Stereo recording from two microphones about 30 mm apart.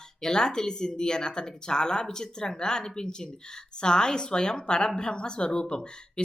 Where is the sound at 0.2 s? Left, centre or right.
Left.